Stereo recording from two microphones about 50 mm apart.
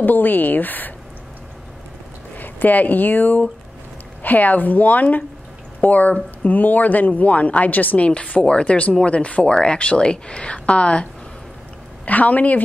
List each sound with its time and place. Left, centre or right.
0.0 s a woman's voice: left
2.3 s speech: left
12.1 s speech: left